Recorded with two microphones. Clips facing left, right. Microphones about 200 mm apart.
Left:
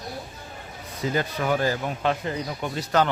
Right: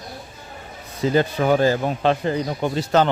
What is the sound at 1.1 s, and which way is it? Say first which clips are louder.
A man's voice: right 7 dB; 30° right (ahead or behind).